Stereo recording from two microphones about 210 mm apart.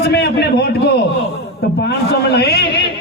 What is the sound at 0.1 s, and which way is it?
A man's voice, 50° left (ahead or behind).